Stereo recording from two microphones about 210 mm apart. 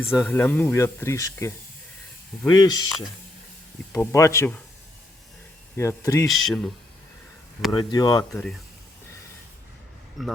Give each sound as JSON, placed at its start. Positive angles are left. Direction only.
{"t": 0.0, "sound": "speech", "side_deg": 10}
{"t": 3.9, "sound": "speech", "side_deg": 15}
{"t": 5.7, "sound": "speech", "side_deg": 10}
{"t": 6.2, "sound": "speech", "side_deg": 0}
{"t": 7.7, "sound": "speech", "side_deg": 20}
{"t": 10.2, "sound": "speech", "side_deg": 0}